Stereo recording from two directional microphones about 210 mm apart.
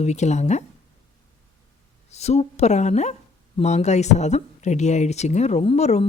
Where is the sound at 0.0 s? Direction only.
35° left (ahead or behind).